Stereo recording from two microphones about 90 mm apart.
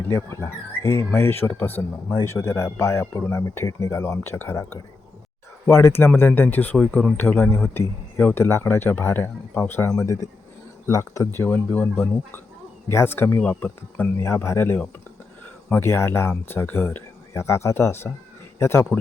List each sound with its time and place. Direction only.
0.1 s speech: 30° left (ahead or behind)
5.6 s speech: 25° left (ahead or behind)
11.3 s speech: 20° left (ahead or behind)
14.2 s speech: 30° left (ahead or behind)